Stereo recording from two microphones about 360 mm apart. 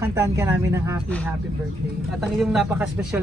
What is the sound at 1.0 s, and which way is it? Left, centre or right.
Speech, centre.